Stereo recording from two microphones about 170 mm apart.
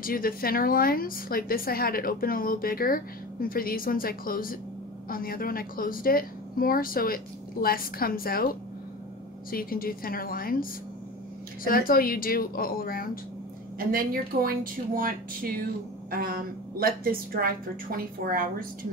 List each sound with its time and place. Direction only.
0.0 s a woman's voice: 60° left (ahead or behind)
9.5 s a woman's voice: 60° left (ahead or behind)
13.7 s speech: 60° right (ahead or behind)